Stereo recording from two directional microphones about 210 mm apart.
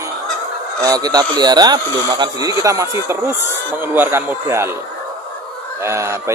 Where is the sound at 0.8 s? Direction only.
15° right (ahead or behind).